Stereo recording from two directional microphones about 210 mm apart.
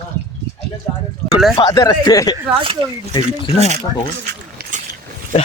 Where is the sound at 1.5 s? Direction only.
20° left (ahead or behind).